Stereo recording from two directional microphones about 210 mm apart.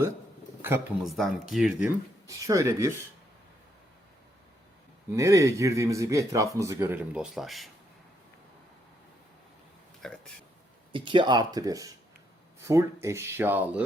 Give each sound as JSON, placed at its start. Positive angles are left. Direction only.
{"t": 0.6, "sound": "speech", "side_deg": -10}
{"t": 2.2, "sound": "speech", "side_deg": -15}
{"t": 5.1, "sound": "speech", "side_deg": -15}
{"t": 10.0, "sound": "speech", "side_deg": 0}
{"t": 10.9, "sound": "speech", "side_deg": -25}